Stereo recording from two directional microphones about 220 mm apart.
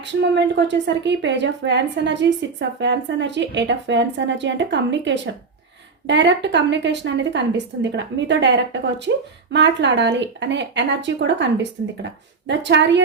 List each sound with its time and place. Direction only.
0.0 s a woman's voice: 55° right (ahead or behind)